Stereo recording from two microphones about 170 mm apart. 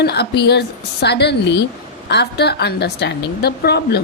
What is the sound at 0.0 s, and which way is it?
A woman's voice, 75° left (ahead or behind).